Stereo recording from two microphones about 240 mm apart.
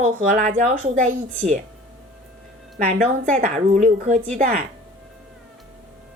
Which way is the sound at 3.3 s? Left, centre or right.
Right.